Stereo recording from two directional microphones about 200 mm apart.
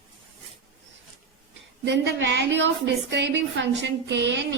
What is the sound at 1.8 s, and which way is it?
A woman's voice, 65° right (ahead or behind).